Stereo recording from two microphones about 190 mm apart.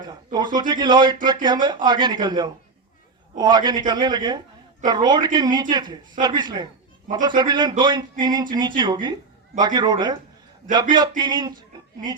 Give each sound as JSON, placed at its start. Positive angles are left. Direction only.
{"t": 0.3, "sound": "speech", "side_deg": -20}